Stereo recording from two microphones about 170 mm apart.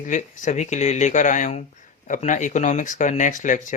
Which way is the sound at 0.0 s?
50° left (ahead or behind).